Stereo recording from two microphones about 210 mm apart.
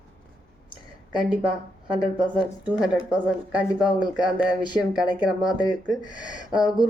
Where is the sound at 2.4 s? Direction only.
Centre (ahead or behind).